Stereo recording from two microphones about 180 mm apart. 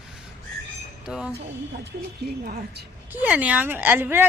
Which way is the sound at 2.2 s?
60° right (ahead or behind).